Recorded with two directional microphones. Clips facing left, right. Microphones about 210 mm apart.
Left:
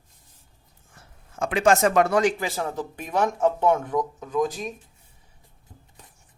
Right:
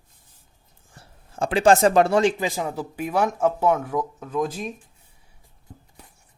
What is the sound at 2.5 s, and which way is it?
Speech, 15° right (ahead or behind).